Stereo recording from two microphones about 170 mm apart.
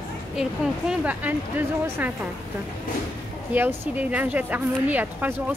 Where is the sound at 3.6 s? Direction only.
10° right (ahead or behind).